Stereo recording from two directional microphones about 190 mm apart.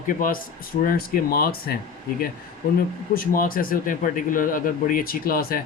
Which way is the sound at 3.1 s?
50° left (ahead or behind).